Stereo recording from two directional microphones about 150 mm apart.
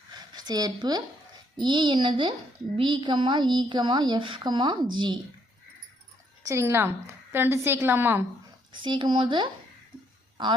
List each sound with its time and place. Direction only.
0.3 s a woman's voice: 25° right (ahead or behind)
6.5 s a woman's voice: 20° right (ahead or behind)
8.8 s a woman's voice: 30° right (ahead or behind)